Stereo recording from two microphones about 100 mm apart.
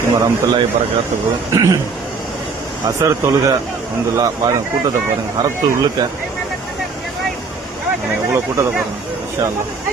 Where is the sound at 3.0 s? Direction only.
30° right (ahead or behind).